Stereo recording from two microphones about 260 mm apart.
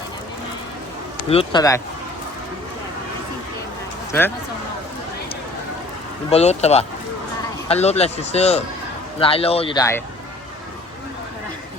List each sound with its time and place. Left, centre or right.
1.3 s speech: centre
6.3 s a man's voice: left